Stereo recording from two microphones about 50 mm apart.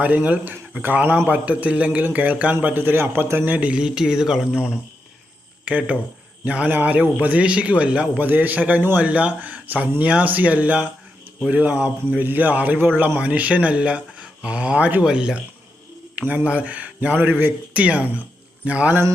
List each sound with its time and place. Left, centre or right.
0.0 s speech: right
3.4 s speech: right
3.7 s a man's voice: centre
8.2 s speech: right
9.0 s speech: right
15.0 s speech: centre
16.1 s speech: right
17.7 s speech: right